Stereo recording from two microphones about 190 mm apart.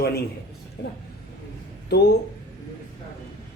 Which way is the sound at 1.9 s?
55° left (ahead or behind).